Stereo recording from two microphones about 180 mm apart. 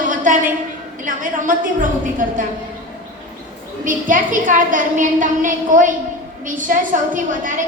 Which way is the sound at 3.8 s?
45° right (ahead or behind).